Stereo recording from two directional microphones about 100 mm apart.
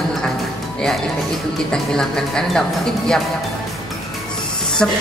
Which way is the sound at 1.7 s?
5° left (ahead or behind).